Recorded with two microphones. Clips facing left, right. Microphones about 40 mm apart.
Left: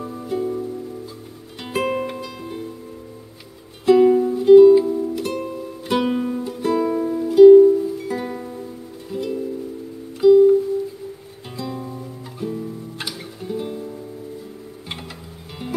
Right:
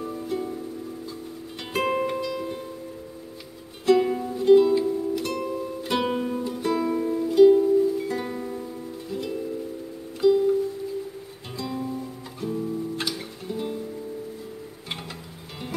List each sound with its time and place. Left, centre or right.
0.3 s music: centre
1.6 s music: centre
3.8 s music: centre
11.5 s guitar: centre